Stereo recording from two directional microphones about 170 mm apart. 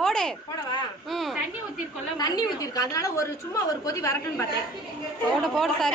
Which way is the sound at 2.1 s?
25° left (ahead or behind).